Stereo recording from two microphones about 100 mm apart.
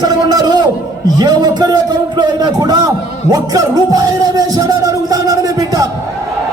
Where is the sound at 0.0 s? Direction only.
40° right (ahead or behind).